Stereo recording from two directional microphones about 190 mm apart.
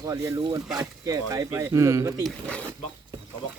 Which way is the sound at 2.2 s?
5° left (ahead or behind).